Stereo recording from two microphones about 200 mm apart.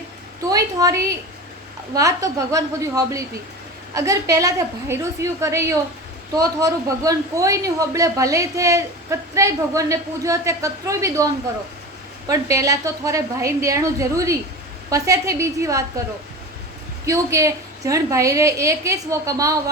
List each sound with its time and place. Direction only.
0.4 s a woman's voice: 15° right (ahead or behind)
12.3 s speech: 15° right (ahead or behind)
17.1 s speech: 15° right (ahead or behind)